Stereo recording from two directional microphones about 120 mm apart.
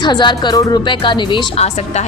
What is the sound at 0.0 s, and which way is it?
A woman's voice, 40° left (ahead or behind).